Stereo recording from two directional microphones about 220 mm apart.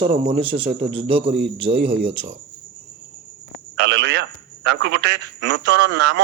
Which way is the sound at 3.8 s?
90° right.